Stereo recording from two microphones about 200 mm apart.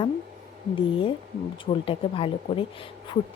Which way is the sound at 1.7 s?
25° left (ahead or behind).